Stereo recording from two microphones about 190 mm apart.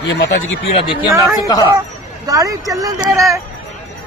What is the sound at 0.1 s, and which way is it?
Speech, 85° left.